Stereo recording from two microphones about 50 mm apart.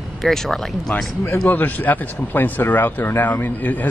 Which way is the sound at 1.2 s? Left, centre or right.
Left.